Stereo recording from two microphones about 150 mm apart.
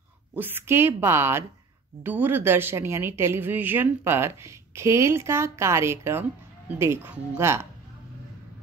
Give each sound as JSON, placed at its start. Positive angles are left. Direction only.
{"t": 0.4, "sound": "speech", "side_deg": -15}